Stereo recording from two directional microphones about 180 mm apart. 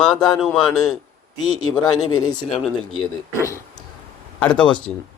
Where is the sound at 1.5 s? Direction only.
20° left (ahead or behind).